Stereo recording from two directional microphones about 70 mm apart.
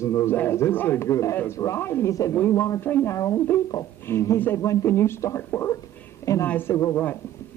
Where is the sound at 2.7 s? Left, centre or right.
Left.